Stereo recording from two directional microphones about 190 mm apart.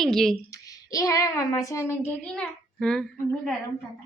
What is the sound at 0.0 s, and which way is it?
Speech, centre (ahead or behind).